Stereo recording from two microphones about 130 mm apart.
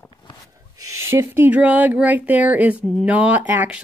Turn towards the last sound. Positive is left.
turn(degrees=-15)  # may be behind; listen again after turning